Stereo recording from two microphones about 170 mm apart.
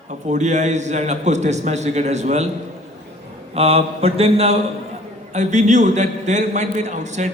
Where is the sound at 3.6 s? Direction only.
35° right (ahead or behind).